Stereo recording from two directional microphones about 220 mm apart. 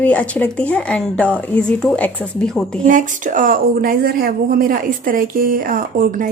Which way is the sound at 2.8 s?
35° right (ahead or behind).